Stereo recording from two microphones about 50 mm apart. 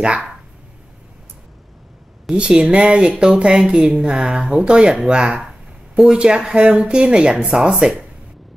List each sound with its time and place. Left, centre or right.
0.0 s speech: right
2.3 s speech: centre